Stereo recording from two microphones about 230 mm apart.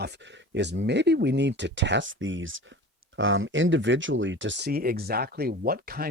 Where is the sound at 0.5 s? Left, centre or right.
Right.